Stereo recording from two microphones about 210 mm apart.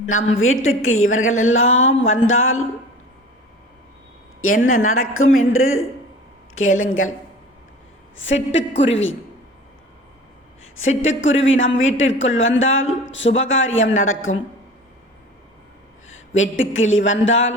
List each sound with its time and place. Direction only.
0.0 s a woman's voice: 75° left (ahead or behind)
4.4 s a woman's voice: 40° left (ahead or behind)
4.8 s speech: 80° left
8.1 s a woman's voice: 65° left (ahead or behind)
10.8 s speech: 70° left (ahead or behind)
16.0 s a sound: 70° left (ahead or behind)
17.1 s a woman's voice: 65° left (ahead or behind)